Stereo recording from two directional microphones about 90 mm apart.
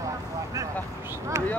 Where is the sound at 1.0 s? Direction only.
30° right (ahead or behind).